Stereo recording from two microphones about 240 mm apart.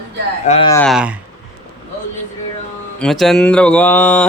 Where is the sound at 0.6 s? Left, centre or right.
Centre.